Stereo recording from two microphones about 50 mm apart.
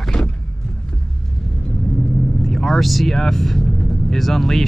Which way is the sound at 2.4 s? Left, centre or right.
Centre.